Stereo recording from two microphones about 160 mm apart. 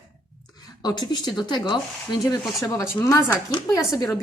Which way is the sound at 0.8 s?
25° left (ahead or behind).